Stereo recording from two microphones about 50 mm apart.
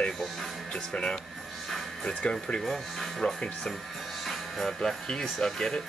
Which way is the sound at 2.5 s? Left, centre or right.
Centre.